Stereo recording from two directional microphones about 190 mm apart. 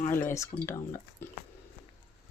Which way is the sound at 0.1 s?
10° left (ahead or behind).